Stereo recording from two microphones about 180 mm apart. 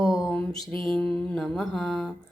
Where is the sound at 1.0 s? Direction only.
5° left (ahead or behind).